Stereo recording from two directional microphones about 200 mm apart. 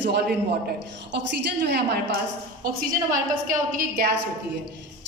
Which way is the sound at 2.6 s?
45° right (ahead or behind).